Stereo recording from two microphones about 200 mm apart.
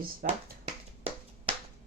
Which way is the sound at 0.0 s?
45° right (ahead or behind).